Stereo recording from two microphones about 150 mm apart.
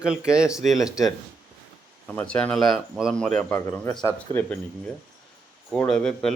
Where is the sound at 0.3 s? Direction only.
5° right (ahead or behind).